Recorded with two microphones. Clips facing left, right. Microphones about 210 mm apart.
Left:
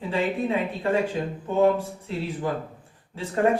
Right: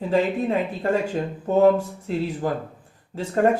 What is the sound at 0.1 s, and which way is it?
A man's voice, 40° right (ahead or behind).